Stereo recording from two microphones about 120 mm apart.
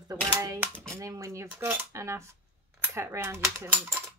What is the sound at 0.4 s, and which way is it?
Speech, 25° right (ahead or behind).